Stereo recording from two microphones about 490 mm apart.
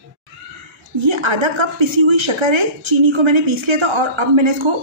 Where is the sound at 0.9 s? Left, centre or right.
Right.